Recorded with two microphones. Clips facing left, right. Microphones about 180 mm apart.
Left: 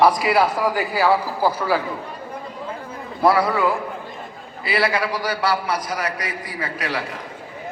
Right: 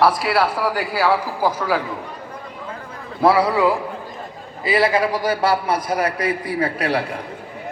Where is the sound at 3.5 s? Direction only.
10° right (ahead or behind).